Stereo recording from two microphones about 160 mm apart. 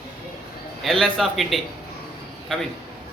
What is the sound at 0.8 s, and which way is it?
Speech, centre (ahead or behind).